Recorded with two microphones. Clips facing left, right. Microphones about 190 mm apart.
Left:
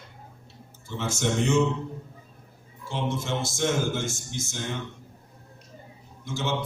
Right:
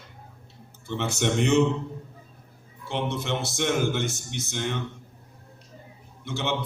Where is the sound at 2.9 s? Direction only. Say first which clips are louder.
Right 1 dB; 65° right (ahead or behind).